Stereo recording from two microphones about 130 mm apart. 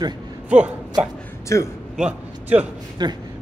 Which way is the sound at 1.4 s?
20° left (ahead or behind).